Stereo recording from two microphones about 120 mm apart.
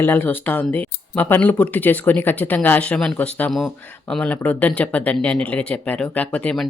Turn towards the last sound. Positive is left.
turn(degrees=10)  # may be behind; listen again after turning